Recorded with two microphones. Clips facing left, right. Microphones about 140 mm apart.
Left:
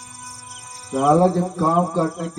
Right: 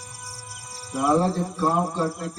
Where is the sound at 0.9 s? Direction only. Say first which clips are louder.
Left 6 dB; 50° left (ahead or behind).